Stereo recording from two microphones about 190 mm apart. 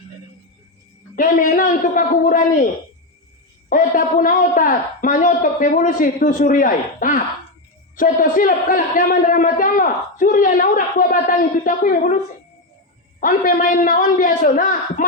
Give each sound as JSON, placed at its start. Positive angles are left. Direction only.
{"t": 1.1, "sound": "a man's voice", "side_deg": 45}
{"t": 3.7, "sound": "a man's voice", "side_deg": 45}